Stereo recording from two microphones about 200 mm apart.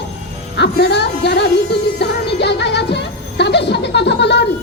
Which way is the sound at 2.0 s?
60° left (ahead or behind).